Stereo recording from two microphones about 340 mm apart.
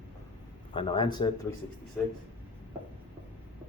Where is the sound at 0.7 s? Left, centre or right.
Centre.